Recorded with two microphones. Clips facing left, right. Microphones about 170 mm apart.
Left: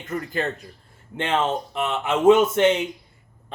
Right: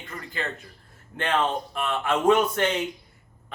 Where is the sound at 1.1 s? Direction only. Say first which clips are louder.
Left 2 dB; 25° left (ahead or behind).